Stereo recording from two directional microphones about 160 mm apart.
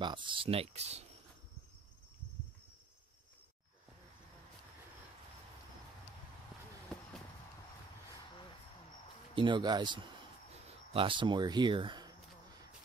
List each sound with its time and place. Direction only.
0.0 s speech: 30° right (ahead or behind)
9.3 s speech: 30° right (ahead or behind)